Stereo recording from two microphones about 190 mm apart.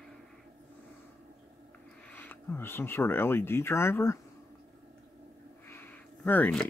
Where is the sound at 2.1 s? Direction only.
10° left (ahead or behind).